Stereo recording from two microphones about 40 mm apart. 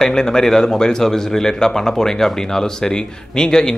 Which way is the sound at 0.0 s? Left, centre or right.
Centre.